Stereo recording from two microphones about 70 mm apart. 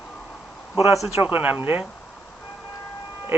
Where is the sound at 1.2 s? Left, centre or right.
Right.